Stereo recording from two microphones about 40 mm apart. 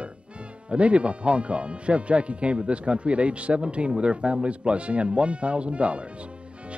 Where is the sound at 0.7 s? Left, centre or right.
Right.